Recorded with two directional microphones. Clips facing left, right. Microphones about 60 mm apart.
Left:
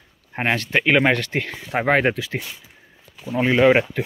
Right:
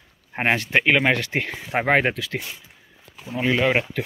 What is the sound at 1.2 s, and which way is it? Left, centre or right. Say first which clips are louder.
Speech: even; centre.